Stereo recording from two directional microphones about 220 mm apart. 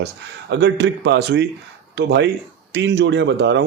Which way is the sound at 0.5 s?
55° right (ahead or behind).